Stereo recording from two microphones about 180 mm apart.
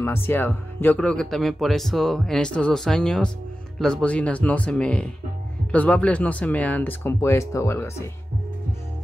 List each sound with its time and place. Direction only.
0.0 s speech: 10° left (ahead or behind)